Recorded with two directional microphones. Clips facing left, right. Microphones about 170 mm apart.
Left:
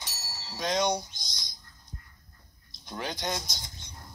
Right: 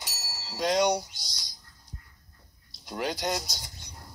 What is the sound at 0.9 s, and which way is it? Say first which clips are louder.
Speech: right 2 dB; 70° right (ahead or behind).